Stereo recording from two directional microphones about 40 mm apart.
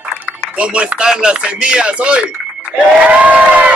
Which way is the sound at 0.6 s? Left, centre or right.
Right.